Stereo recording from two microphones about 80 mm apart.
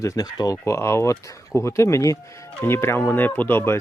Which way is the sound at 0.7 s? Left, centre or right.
Left.